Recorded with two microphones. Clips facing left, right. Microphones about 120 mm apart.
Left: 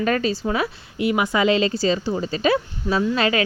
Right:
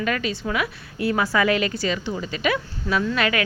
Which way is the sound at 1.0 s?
20° left (ahead or behind).